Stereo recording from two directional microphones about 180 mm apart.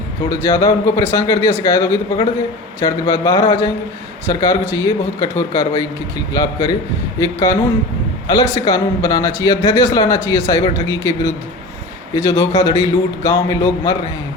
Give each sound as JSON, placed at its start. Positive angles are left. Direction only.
{"t": 0.3, "sound": "a man's voice", "side_deg": 15}